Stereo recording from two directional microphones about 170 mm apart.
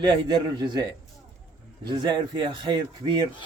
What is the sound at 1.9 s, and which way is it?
Speech, 25° right (ahead or behind).